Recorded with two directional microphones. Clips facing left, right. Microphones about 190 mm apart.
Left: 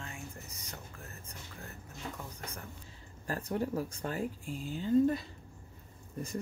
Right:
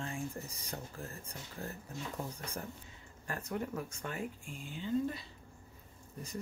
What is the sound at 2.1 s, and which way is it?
Speech, 30° right (ahead or behind).